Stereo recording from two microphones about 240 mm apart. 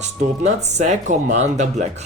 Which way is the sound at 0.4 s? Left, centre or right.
Right.